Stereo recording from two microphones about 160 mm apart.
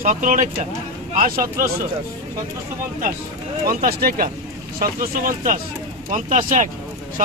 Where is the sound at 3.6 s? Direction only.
65° right (ahead or behind).